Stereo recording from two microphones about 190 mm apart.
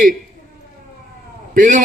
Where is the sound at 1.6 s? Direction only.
45° right (ahead or behind).